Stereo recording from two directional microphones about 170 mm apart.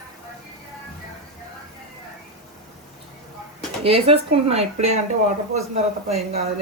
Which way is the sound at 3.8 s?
35° right (ahead or behind).